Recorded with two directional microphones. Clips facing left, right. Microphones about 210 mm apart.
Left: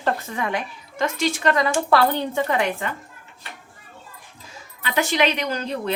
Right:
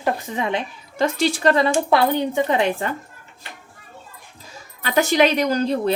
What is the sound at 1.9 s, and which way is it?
Speech, 15° right (ahead or behind).